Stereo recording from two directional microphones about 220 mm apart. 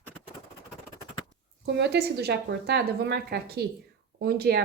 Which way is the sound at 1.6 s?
50° right (ahead or behind).